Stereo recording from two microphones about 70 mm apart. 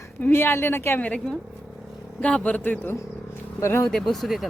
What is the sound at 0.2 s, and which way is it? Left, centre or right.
Speech, left.